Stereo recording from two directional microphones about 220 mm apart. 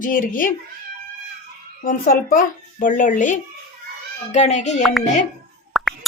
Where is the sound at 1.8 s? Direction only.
40° left (ahead or behind).